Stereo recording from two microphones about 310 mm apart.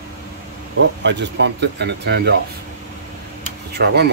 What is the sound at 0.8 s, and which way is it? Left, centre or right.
Speech, right.